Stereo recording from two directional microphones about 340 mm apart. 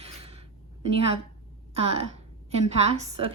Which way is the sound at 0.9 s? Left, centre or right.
Centre.